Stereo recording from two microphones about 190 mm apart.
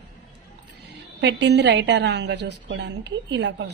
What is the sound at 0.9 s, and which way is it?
A woman's voice, 65° right (ahead or behind).